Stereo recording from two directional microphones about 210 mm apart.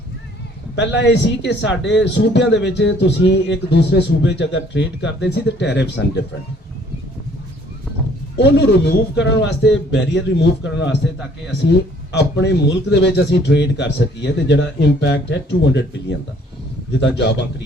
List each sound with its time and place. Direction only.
0.8 s a man's voice: 60° left (ahead or behind)
8.4 s a man's voice: 55° left (ahead or behind)